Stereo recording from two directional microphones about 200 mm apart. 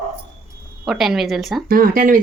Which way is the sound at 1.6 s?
45° right (ahead or behind).